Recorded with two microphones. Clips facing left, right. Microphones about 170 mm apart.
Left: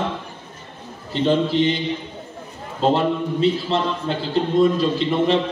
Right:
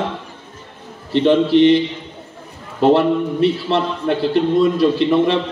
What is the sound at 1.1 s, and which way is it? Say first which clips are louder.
A man's voice: right 5 dB; 70° right (ahead or behind).